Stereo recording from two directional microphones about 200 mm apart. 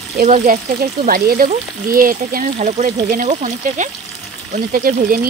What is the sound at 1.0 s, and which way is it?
Speech, 45° right (ahead or behind).